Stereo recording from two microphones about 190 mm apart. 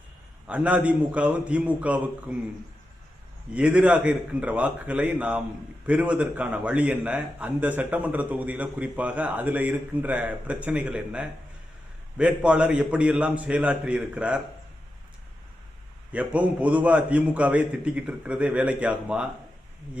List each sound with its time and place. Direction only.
0.4 s a man's voice: 5° right (ahead or behind)
3.5 s a man's voice: 5° right (ahead or behind)
16.1 s a man's voice: 5° right (ahead or behind)